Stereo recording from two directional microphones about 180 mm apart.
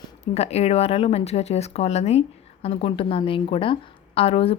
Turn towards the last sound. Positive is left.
turn(degrees=30)  # may be behind; listen again after turning